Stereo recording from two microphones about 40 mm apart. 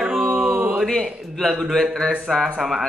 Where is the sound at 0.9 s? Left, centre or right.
Centre.